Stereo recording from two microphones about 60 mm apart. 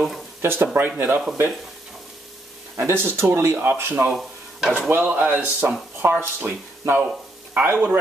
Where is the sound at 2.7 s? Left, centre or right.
Right.